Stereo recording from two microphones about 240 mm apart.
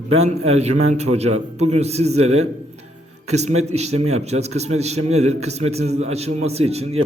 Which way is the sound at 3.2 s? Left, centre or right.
Right.